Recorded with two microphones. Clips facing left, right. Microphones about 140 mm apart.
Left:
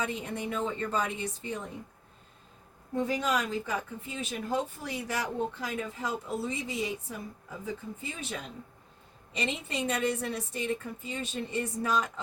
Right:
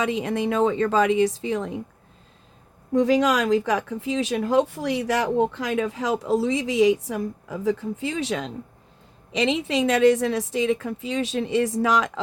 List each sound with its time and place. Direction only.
0.0 s speech: 90° right
2.9 s speech: 90° right